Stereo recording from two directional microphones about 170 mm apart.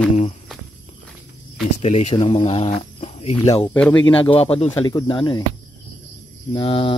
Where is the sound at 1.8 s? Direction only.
40° left (ahead or behind).